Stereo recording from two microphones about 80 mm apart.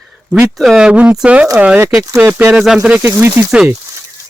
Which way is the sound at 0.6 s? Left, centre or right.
Centre.